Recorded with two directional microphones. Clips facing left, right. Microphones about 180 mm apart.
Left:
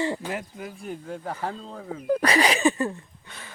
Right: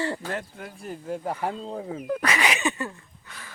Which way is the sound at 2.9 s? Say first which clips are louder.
Left 5 dB; 25° left (ahead or behind).